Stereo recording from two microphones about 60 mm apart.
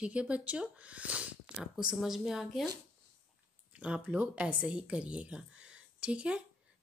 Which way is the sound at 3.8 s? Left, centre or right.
Centre.